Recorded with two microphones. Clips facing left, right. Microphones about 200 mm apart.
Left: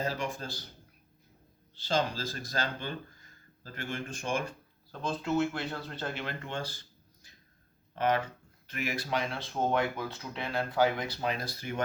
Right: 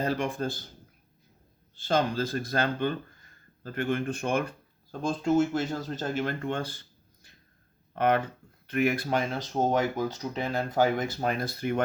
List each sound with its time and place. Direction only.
0.0 s speech: 55° right (ahead or behind)
1.7 s speech: 55° right (ahead or behind)
4.9 s speech: 45° right (ahead or behind)